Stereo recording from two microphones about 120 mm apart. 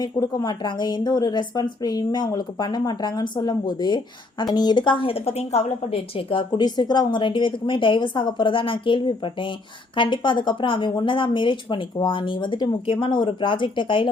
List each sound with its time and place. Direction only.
0.0 s a woman's voice: 35° left (ahead or behind)